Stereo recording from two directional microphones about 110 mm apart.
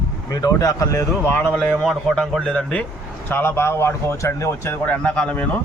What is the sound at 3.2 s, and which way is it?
Speech, 20° left (ahead or behind).